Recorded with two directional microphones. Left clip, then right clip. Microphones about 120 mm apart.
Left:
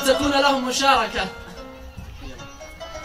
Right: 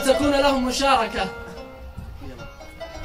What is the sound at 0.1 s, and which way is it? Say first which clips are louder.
Child singing: even; 25° left (ahead or behind).